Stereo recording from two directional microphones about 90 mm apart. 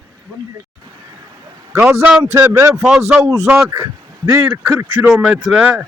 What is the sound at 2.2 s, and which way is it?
Speech, 35° right (ahead or behind).